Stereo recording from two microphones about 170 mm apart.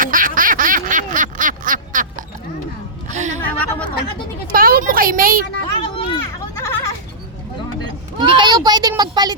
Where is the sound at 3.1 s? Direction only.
45° right (ahead or behind).